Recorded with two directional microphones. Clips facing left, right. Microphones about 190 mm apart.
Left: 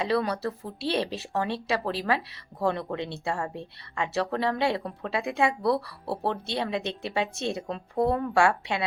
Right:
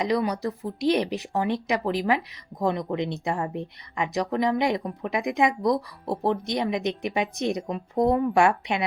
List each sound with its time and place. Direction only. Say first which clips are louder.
0.0 s speech: right 2 dB; 15° right (ahead or behind)